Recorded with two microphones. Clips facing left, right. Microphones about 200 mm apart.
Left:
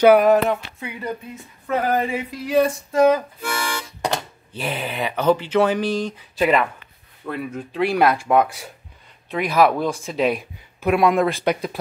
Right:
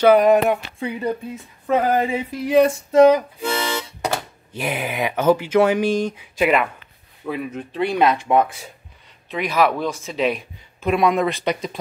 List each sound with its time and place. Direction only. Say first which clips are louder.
0.0 s speech: even; 5° left (ahead or behind)
0.7 s speech: right 6 dB; 30° right (ahead or behind)
1.7 s a sound: right 3 dB; 25° right (ahead or behind)
4.0 s speech: even; 10° right (ahead or behind)
7.8 s speech: even; 5° left (ahead or behind)